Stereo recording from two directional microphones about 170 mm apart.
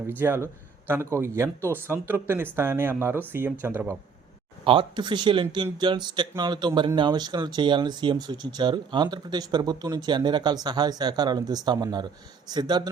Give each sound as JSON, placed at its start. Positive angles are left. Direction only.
{"t": 0.1, "sound": "speech", "side_deg": -15}
{"t": 4.6, "sound": "speech", "side_deg": -30}